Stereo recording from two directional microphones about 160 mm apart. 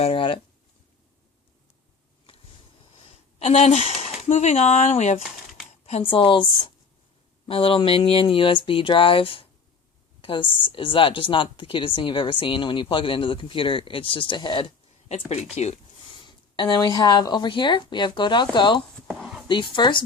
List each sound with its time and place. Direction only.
0.0 s speech: 35° left (ahead or behind)
2.9 s speech: 40° left (ahead or behind)
7.4 s speech: 35° left (ahead or behind)
15.3 s speech: 45° left (ahead or behind)
16.2 s speech: 25° left (ahead or behind)
19.1 s a sound: centre (ahead or behind)
19.5 s speech: 30° left (ahead or behind)